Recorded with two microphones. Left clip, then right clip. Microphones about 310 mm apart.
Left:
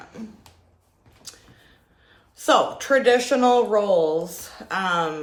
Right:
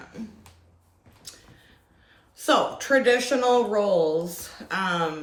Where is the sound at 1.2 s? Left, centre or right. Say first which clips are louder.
Left 2 dB; centre.